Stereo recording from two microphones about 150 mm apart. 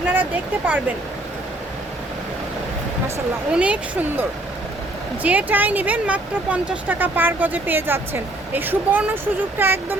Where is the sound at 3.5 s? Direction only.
10° right (ahead or behind).